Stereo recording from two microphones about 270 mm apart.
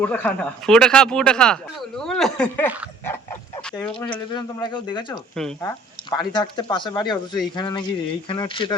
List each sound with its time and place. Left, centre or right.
0.0 s speech: centre
4.3 s speech: centre
5.4 s speech: centre
6.3 s speech: centre